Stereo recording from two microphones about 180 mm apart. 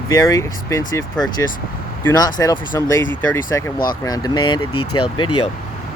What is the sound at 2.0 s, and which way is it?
Speech, 20° left (ahead or behind).